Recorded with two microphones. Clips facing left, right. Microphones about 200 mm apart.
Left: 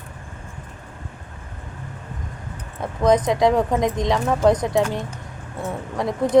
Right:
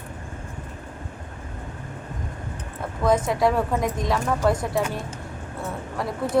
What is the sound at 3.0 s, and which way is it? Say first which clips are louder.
A woman's voice: left 4 dB; 20° left (ahead or behind).